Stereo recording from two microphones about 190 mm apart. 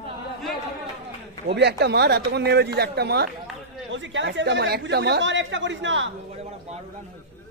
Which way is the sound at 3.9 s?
75° right (ahead or behind).